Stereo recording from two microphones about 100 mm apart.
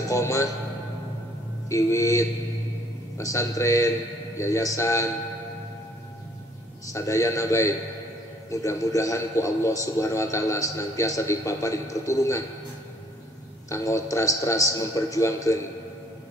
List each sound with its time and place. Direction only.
0.1 s a man's voice: 30° left (ahead or behind)
1.7 s a man's voice: 30° left (ahead or behind)
6.9 s a man's voice: 30° left (ahead or behind)
13.7 s a man's voice: 30° left (ahead or behind)